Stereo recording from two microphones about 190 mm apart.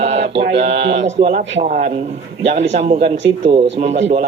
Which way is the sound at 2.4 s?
70° right (ahead or behind).